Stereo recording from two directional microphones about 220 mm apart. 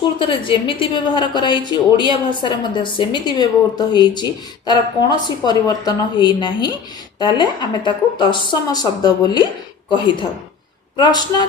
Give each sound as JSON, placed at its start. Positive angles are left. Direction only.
{"t": 0.0, "sound": "a woman's voice", "side_deg": 20}